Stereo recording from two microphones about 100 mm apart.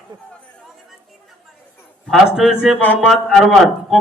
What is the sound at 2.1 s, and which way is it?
Speech, 5° right (ahead or behind).